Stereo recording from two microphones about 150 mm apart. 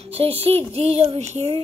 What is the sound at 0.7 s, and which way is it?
Child singing, 45° right (ahead or behind).